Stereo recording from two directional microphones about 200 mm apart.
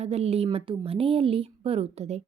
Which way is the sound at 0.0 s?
30° right (ahead or behind).